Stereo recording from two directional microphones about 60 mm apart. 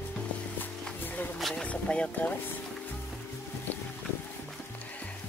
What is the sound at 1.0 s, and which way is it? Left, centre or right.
Music, left.